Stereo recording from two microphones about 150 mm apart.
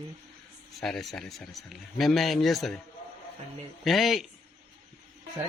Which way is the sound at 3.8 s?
Centre (ahead or behind).